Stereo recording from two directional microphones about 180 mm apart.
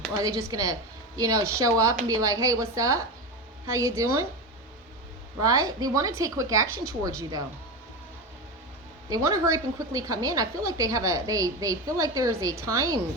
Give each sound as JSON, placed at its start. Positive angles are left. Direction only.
{"t": 0.2, "sound": "a woman's voice", "side_deg": -15}
{"t": 5.4, "sound": "a woman's voice", "side_deg": -20}
{"t": 9.0, "sound": "a woman's voice", "side_deg": -20}